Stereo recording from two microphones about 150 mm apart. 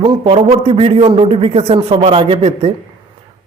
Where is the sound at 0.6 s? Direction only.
40° right (ahead or behind).